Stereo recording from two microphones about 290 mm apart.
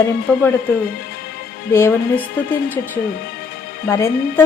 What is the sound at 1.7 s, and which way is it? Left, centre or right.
A woman's voice, centre.